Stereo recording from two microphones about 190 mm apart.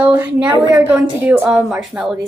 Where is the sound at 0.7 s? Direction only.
10° right (ahead or behind).